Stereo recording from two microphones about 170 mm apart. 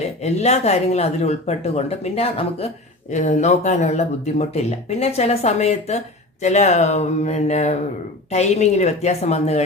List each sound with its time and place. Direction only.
0.2 s speech: 40° left (ahead or behind)